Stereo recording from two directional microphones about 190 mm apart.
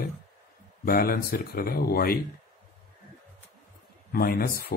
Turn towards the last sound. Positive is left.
turn(degrees=50)  # may be behind; listen again after turning